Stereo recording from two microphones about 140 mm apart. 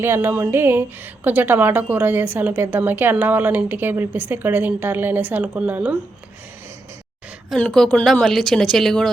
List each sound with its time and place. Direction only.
0.0 s speech: 15° right (ahead or behind)
7.5 s a woman's voice: 5° left (ahead or behind)